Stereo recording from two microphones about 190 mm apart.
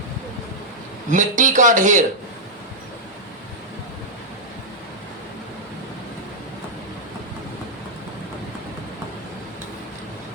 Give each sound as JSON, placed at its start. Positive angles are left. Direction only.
{"t": 1.1, "sound": "speech", "side_deg": -40}